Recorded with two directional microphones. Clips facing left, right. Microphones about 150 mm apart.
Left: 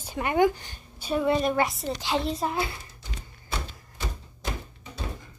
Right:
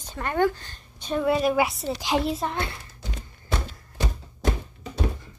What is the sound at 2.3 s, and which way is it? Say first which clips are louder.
Speech: even; 5° left (ahead or behind).